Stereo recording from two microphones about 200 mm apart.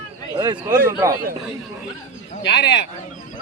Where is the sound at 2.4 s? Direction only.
55° left (ahead or behind).